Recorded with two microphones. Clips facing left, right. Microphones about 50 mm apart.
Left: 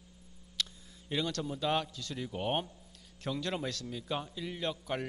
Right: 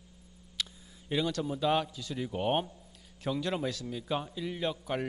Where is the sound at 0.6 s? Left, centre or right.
Centre.